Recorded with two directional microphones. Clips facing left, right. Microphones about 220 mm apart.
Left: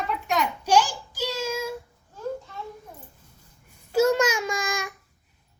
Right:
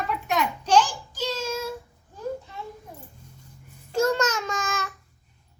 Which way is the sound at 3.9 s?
10° left (ahead or behind).